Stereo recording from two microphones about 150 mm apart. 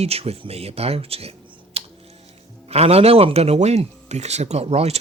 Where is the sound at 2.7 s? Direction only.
45° right (ahead or behind).